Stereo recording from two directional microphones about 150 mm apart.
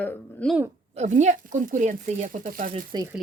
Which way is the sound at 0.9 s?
50° right (ahead or behind).